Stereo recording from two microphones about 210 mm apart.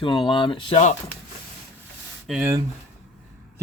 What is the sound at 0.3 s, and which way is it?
Speech, 25° left (ahead or behind).